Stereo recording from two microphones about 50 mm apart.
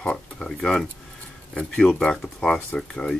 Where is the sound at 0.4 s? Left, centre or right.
Centre.